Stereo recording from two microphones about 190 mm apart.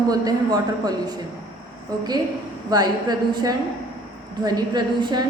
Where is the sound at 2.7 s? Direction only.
20° right (ahead or behind).